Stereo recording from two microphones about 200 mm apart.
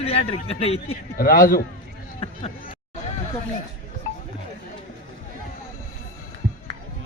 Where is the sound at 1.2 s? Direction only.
45° left (ahead or behind).